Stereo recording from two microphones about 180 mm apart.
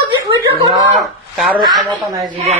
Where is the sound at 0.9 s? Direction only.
Centre (ahead or behind).